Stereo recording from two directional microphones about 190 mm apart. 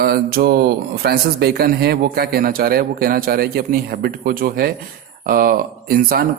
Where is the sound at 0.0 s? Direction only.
50° right (ahead or behind).